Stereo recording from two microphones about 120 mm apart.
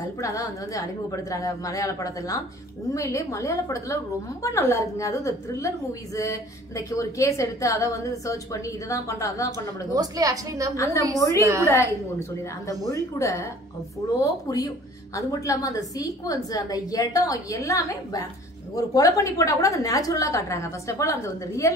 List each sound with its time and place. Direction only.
0.2 s a woman's voice: 25° left (ahead or behind)
9.9 s a woman's voice: 30° right (ahead or behind)
10.8 s a woman's voice: 25° left (ahead or behind)
11.4 s a woman's voice: 25° right (ahead or behind)
11.7 s a woman's voice: 25° left (ahead or behind)